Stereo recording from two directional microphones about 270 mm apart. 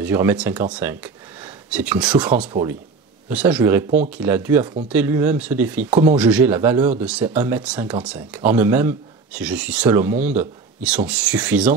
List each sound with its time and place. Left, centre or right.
0.0 s speech: centre
0.7 s a sound: centre
2.1 s speech: centre